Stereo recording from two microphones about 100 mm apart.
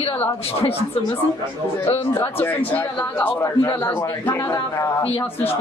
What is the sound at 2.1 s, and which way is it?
A man's voice, 15° left (ahead or behind).